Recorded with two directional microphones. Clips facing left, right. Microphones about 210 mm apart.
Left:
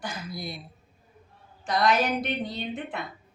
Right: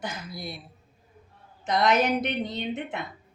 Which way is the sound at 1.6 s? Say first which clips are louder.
Right 1 dB; 20° right (ahead or behind).